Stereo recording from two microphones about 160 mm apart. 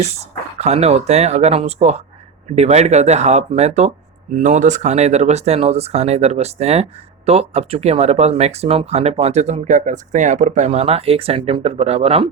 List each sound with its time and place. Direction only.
0.0 s speech: 40° right (ahead or behind)